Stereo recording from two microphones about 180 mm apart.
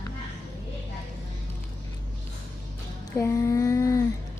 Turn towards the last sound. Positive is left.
turn(degrees=15)  # may be behind; listen again after turning